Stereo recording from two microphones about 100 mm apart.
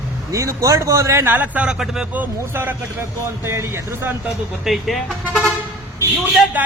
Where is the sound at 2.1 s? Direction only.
20° right (ahead or behind).